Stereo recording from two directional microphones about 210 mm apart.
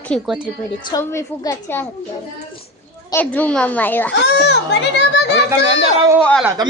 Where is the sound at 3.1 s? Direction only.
10° left (ahead or behind).